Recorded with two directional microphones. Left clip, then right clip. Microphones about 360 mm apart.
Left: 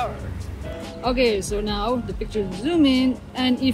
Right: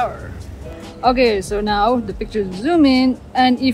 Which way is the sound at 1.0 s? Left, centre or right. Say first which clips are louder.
Right 6 dB; right.